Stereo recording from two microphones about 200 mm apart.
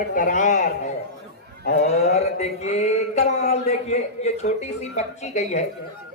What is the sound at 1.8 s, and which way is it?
A woman's voice, 35° left (ahead or behind).